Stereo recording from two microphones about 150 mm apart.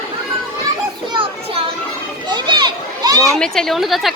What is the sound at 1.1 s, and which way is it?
Children playing, 35° right (ahead or behind).